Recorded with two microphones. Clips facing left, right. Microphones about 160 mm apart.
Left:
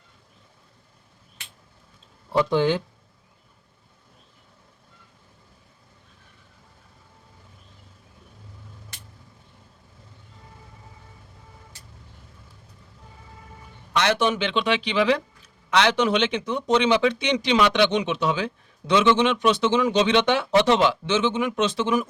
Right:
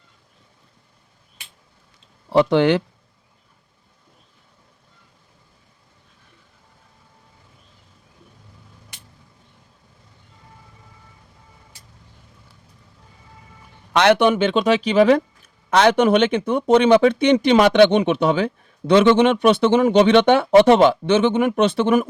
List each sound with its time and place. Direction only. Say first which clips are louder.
2.3 s speech: right 5 dB; 80° right
13.9 s speech: right 7 dB; 60° right (ahead or behind)